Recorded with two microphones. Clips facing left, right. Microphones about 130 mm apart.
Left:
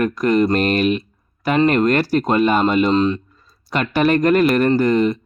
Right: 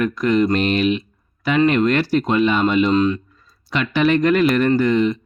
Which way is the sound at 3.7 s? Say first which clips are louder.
Left 1 dB; 45° left (ahead or behind).